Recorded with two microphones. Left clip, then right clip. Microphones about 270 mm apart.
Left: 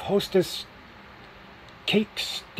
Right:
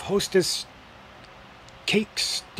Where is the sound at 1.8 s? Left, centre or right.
Centre.